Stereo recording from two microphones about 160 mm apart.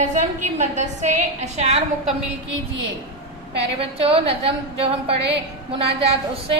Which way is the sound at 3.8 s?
35° right (ahead or behind).